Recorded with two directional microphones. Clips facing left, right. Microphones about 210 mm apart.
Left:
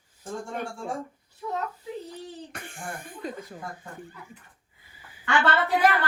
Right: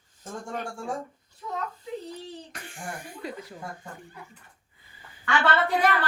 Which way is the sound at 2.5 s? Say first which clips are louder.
Left 1 dB; 55° left (ahead or behind).